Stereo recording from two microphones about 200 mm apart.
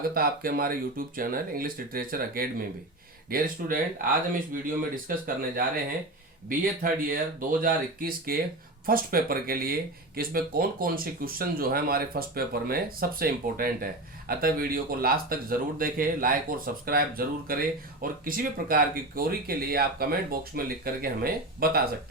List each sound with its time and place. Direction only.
0.1 s speech: 45° right (ahead or behind)